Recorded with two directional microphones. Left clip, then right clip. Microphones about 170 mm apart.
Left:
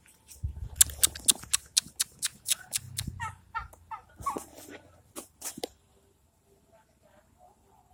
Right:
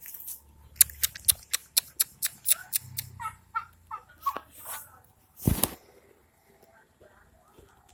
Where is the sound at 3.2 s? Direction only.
30° right (ahead or behind).